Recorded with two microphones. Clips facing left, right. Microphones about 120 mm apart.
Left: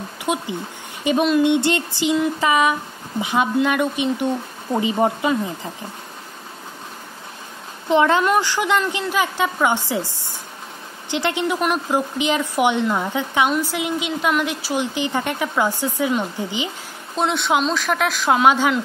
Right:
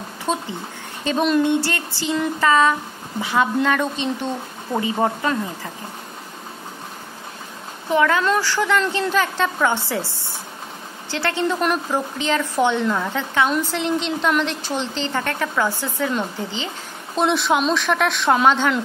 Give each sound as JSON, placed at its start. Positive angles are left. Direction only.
{"t": 0.2, "sound": "a woman's voice", "side_deg": 15}
{"t": 7.9, "sound": "a woman's voice", "side_deg": 20}
{"t": 17.2, "sound": "speech", "side_deg": 0}